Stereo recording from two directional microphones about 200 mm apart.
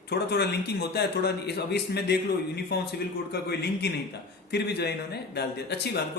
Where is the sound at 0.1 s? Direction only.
55° left (ahead or behind).